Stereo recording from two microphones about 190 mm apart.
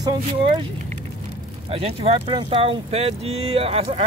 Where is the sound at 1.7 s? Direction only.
30° right (ahead or behind).